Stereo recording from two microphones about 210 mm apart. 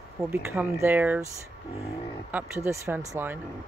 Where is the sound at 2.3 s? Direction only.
10° right (ahead or behind).